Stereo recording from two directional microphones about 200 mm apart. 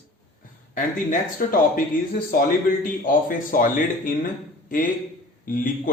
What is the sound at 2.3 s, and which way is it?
A man's voice, 45° left (ahead or behind).